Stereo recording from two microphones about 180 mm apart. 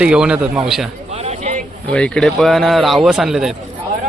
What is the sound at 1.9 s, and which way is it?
A man's voice, 5° left (ahead or behind).